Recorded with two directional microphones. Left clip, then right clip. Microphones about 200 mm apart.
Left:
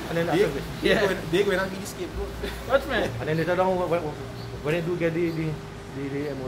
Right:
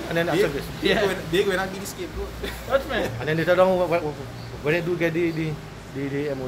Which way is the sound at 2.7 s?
15° left (ahead or behind).